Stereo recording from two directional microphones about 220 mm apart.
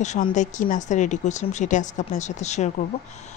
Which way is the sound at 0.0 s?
35° left (ahead or behind).